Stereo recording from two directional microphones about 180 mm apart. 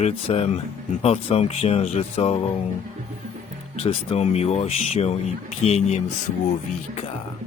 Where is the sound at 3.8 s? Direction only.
35° left (ahead or behind).